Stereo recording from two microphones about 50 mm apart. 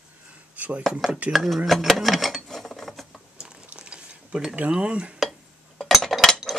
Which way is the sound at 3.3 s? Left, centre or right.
Right.